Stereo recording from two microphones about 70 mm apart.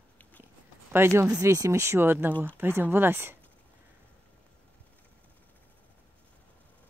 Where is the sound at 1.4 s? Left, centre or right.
Right.